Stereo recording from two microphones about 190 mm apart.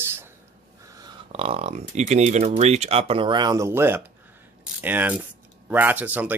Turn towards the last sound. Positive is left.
turn(degrees=-10)  # may be behind; listen again after turning